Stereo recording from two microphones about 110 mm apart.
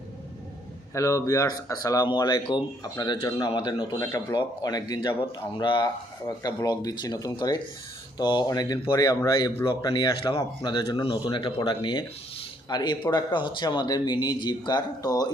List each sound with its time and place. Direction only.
0.9 s speech: 30° left (ahead or behind)
3.9 s speech: 30° left (ahead or behind)